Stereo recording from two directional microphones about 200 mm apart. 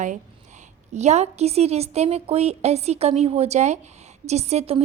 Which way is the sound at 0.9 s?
35° right (ahead or behind).